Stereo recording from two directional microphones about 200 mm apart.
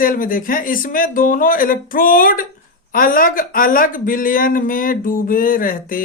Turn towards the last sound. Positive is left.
turn(degrees=45)  # may be behind; listen again after turning